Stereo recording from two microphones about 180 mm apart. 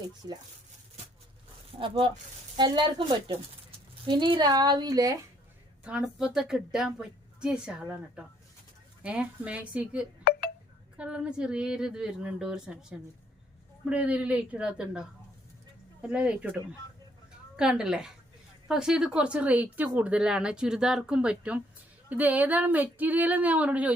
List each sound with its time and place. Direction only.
0.2 s a woman's voice: 20° right (ahead or behind)
1.8 s a woman's voice: 30° right (ahead or behind)
5.8 s speech: 5° right (ahead or behind)
17.6 s speech: 5° right (ahead or behind)